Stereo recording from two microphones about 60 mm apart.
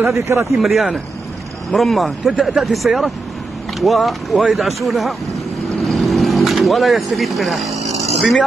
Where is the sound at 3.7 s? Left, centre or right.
Centre.